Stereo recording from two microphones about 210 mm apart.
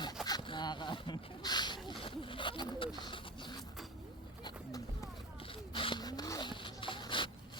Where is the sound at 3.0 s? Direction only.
20° left (ahead or behind).